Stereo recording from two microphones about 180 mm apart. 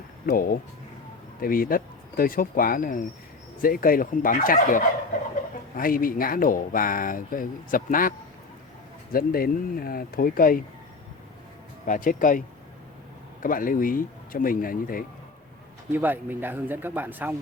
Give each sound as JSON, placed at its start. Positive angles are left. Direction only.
{"t": 0.3, "sound": "speech", "side_deg": 55}
{"t": 9.1, "sound": "speech", "side_deg": 55}
{"t": 11.9, "sound": "speech", "side_deg": 45}
{"t": 13.4, "sound": "speech", "side_deg": 50}
{"t": 15.9, "sound": "speech", "side_deg": -10}